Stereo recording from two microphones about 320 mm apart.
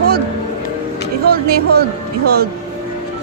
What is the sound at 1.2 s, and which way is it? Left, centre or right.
Speech, right.